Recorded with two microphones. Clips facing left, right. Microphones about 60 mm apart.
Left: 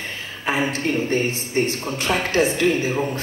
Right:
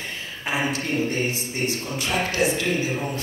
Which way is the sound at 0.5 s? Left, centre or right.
Left.